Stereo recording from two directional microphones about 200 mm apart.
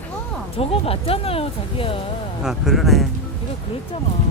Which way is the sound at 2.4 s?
Centre (ahead or behind).